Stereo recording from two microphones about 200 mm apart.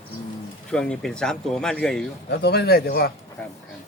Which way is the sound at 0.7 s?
5° left (ahead or behind).